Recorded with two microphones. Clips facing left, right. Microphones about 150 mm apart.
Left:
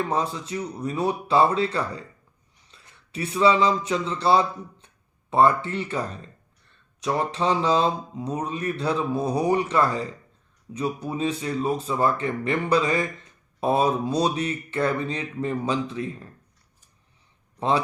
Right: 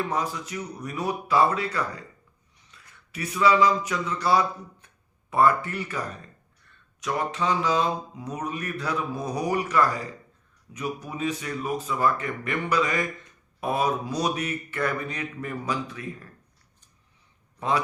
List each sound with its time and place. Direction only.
0.0 s speech: 25° left (ahead or behind)